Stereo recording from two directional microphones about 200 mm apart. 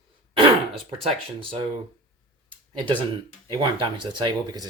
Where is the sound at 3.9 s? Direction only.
25° right (ahead or behind).